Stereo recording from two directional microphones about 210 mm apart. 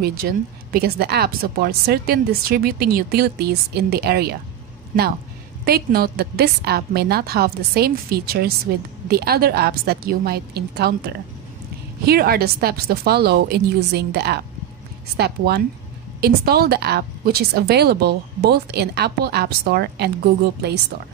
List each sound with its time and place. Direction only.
0.2 s speech: 50° right (ahead or behind)
5.7 s speech: 45° right (ahead or behind)